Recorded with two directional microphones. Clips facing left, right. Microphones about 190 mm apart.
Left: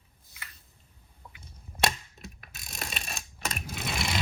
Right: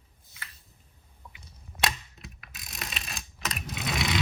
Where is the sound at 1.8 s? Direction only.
Centre (ahead or behind).